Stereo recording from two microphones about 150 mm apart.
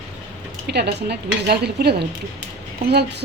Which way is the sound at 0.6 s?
90° right.